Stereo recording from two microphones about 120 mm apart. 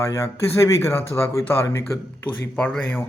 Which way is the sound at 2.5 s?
10° left (ahead or behind).